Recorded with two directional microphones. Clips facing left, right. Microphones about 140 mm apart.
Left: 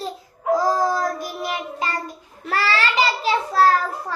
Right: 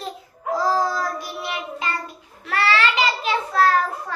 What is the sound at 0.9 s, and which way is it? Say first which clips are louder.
Child singing: left 3 dB; 45° left (ahead or behind).